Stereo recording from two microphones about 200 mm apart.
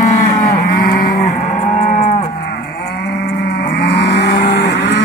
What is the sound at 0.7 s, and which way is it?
Livestock, 45° left (ahead or behind).